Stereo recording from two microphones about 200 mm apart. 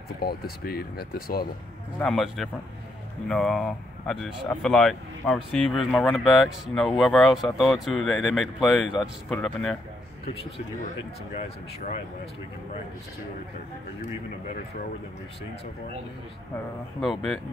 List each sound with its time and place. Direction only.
0.2 s speech: 50° left (ahead or behind)
2.0 s speech: centre (ahead or behind)
17.0 s speech: centre (ahead or behind)